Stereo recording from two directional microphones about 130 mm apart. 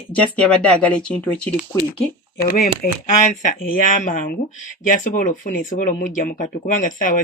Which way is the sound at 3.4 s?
80° left.